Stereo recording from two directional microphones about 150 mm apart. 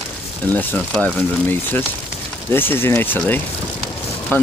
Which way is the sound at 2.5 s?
15° left (ahead or behind).